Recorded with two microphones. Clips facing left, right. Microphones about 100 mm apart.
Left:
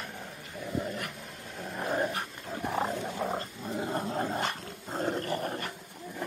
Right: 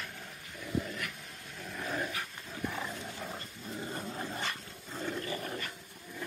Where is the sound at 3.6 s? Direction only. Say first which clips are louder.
Left 5 dB; 65° left (ahead or behind).